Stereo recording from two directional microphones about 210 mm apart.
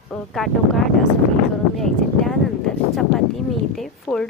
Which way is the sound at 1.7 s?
Centre (ahead or behind).